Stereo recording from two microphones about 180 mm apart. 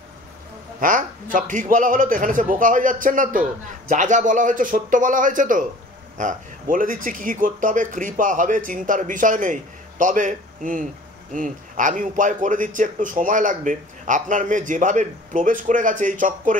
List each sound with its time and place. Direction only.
0.7 s a man's voice: 50° right (ahead or behind)